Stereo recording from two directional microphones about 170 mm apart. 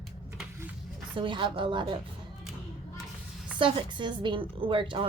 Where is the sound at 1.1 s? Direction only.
30° right (ahead or behind).